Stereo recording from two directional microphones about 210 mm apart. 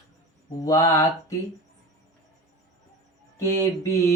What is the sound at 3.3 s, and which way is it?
Mantra, 15° left (ahead or behind).